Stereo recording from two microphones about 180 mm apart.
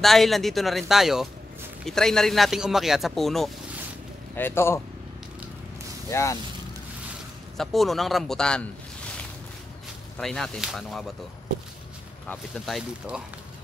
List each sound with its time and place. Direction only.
0.0 s speech: centre (ahead or behind)
4.4 s a man's voice: 15° left (ahead or behind)
6.0 s speech: 15° left (ahead or behind)
7.5 s speech: centre (ahead or behind)
10.1 s speech: 5° left (ahead or behind)
12.3 s speech: centre (ahead or behind)